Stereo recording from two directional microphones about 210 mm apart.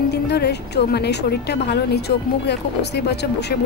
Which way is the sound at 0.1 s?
50° left (ahead or behind).